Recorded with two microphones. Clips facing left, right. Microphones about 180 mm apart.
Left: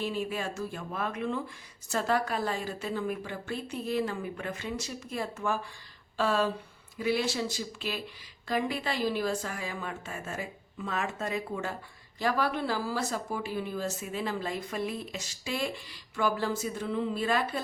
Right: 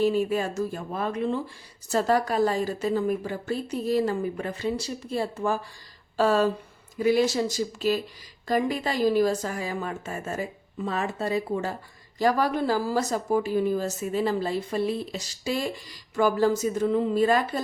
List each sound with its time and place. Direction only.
0.0 s a woman's voice: 40° right (ahead or behind)